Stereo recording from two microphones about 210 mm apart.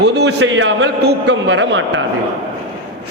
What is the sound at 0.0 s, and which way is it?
A man's voice, 50° right (ahead or behind).